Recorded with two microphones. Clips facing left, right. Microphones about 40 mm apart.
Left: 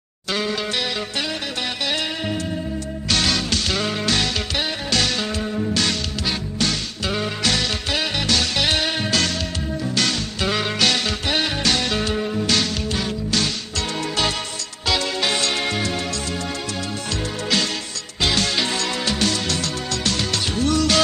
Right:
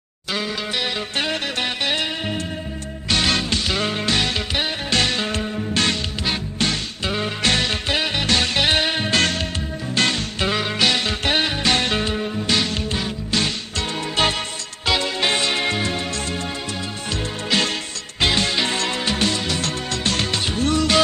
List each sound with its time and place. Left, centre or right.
1.9 s music: right
4.9 s music: right
5.4 s music: centre
5.7 s music: right
8.6 s music: right
9.1 s music: right
10.5 s music: centre
10.8 s music: centre
11.7 s music: right
12.1 s music: centre
12.5 s music: centre
13.3 s music: right
17.5 s music: right
19.6 s music: right